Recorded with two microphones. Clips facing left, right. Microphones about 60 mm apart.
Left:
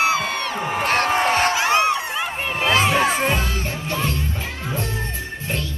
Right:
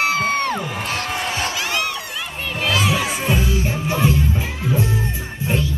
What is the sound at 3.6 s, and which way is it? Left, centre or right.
Music, centre.